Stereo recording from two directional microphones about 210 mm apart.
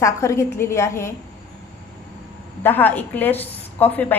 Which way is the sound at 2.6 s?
10° left (ahead or behind).